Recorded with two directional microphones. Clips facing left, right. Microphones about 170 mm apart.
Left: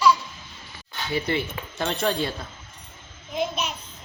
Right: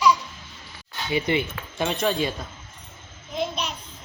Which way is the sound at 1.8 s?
5° right (ahead or behind).